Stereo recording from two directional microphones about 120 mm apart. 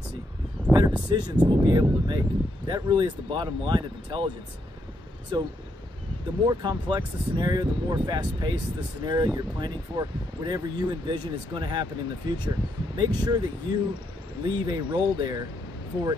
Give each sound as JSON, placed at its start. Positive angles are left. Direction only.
{"t": 0.7, "sound": "a sound", "side_deg": -30}
{"t": 1.0, "sound": "speech", "side_deg": -40}
{"t": 5.3, "sound": "speech", "side_deg": -40}